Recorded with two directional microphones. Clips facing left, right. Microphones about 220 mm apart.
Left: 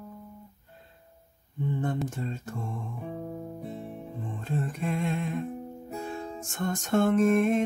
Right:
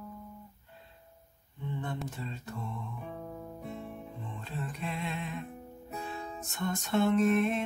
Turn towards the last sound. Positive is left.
turn(degrees=45)  # may be behind; listen again after turning